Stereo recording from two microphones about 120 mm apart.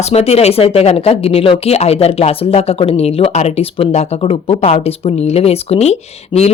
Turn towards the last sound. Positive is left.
turn(degrees=40)  # may be behind; listen again after turning